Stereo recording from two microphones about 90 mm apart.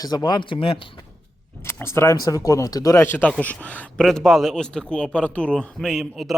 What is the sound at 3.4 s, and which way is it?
Speech, 15° left (ahead or behind).